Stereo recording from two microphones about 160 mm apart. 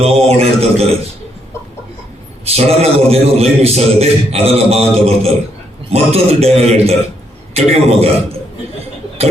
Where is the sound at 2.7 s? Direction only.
40° right (ahead or behind).